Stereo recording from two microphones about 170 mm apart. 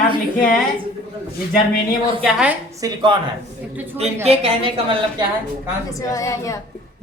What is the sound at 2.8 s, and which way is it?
Speech, 20° right (ahead or behind).